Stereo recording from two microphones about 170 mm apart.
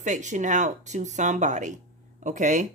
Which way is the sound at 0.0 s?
45° right (ahead or behind).